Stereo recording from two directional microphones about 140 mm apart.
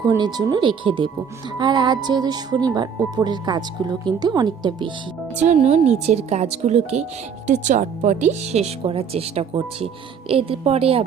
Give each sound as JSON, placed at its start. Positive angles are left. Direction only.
{"t": 0.0, "sound": "speech", "side_deg": -30}
{"t": 5.4, "sound": "speech", "side_deg": -50}